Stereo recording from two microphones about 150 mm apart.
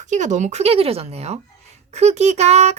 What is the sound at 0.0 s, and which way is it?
A child's voice, 55° right (ahead or behind).